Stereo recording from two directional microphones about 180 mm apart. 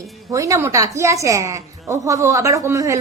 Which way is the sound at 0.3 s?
20° right (ahead or behind).